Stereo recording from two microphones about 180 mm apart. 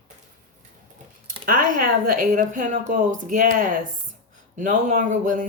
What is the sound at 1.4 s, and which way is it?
A woman's voice, 50° right (ahead or behind).